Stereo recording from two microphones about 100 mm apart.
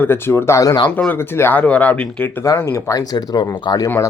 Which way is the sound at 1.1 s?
25° left (ahead or behind).